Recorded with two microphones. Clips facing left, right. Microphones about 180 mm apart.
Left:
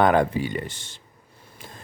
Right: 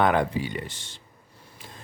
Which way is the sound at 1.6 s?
50° left (ahead or behind).